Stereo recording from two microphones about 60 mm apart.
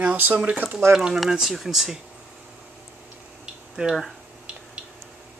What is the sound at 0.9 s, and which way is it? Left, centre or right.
Speech, centre.